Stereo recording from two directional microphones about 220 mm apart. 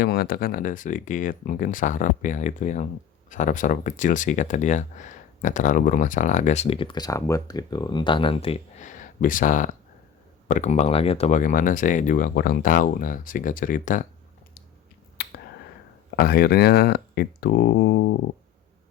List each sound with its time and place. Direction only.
0.0 s speech: 45° left (ahead or behind)
15.2 s finger snapping: 45° left (ahead or behind)
16.1 s speech: 45° left (ahead or behind)